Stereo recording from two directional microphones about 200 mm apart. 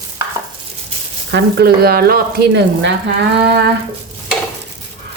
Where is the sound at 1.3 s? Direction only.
55° right (ahead or behind).